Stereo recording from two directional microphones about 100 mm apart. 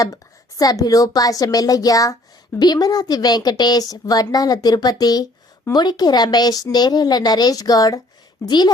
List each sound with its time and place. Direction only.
0.0 s a woman's voice: 35° left (ahead or behind)